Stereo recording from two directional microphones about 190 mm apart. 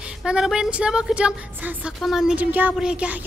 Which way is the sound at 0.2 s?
5° right (ahead or behind).